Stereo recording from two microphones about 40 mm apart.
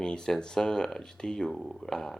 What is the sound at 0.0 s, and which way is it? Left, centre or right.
Speech, centre.